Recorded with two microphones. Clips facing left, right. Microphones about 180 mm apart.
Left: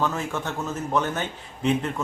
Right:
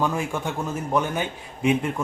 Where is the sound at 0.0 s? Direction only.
10° right (ahead or behind).